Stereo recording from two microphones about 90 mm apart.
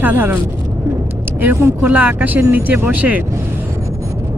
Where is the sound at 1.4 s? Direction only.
25° right (ahead or behind).